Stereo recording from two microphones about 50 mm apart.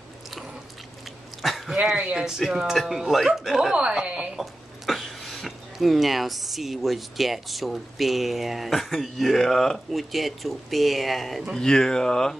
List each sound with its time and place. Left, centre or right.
1.4 s a sound: centre
2.1 s speech: centre
3.7 s a woman's voice: right
4.4 s speech: centre